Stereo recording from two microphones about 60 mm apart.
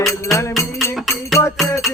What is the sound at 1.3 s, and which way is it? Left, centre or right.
Music, left.